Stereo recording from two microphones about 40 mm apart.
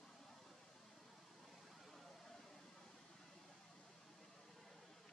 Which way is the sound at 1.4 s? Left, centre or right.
Centre.